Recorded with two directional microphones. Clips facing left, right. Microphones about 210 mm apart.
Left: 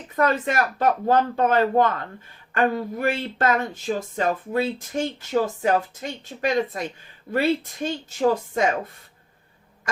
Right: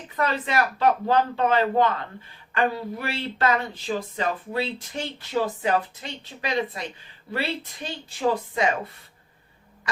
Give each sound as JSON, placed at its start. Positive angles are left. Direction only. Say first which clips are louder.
{"t": 0.2, "sound": "speech", "louder": "left 3 dB", "side_deg": 50}